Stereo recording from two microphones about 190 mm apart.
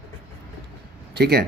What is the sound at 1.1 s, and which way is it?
Speech, 60° right (ahead or behind).